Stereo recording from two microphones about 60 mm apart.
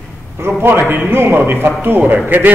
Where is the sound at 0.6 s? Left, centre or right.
Right.